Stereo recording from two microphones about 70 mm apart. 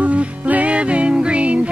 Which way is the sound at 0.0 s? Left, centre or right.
Centre.